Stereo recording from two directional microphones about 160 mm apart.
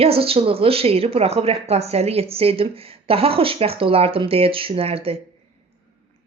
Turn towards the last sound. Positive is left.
turn(degrees=-35)  # may be behind; listen again after turning